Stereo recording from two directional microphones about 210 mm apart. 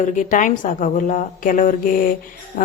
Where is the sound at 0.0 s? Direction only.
35° left (ahead or behind).